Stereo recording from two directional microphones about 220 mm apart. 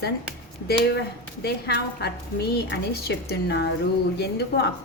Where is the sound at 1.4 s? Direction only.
50° left (ahead or behind).